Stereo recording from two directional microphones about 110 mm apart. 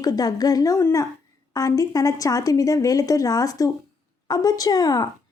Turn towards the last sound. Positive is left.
turn(degrees=35)  # may be behind; listen again after turning